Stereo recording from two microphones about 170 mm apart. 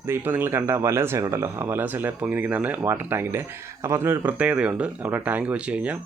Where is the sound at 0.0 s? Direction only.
10° right (ahead or behind).